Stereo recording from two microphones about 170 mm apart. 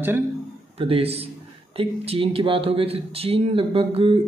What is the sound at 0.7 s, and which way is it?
Speech, 35° right (ahead or behind).